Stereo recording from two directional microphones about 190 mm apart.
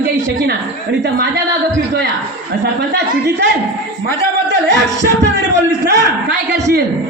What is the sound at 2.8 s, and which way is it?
Speech, 65° right (ahead or behind).